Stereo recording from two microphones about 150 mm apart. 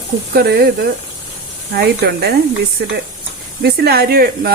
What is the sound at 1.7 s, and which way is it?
Speech, 90° right.